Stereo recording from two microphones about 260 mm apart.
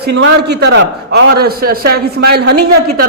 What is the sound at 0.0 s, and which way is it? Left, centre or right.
A man's voice, right.